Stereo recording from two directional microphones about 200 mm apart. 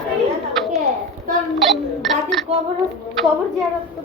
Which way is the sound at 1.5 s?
Centre (ahead or behind).